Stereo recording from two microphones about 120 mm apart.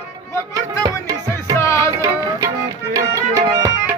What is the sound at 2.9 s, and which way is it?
Music, 25° right (ahead or behind).